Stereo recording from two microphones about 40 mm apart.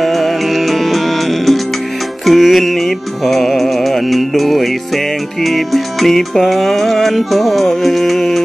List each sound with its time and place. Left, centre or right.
0.0 s music: centre